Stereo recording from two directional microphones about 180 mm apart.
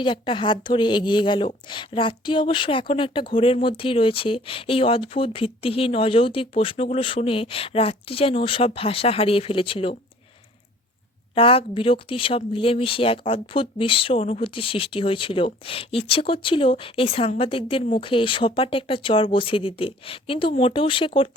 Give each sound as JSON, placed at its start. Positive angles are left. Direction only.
{"t": 0.0, "sound": "speech", "side_deg": 25}
{"t": 11.3, "sound": "speech", "side_deg": 30}